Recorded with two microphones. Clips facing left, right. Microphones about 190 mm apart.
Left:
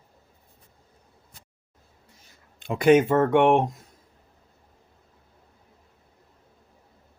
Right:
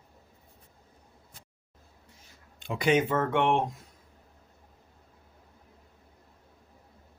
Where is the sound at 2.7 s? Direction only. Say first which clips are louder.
Left 7 dB; 50° left (ahead or behind).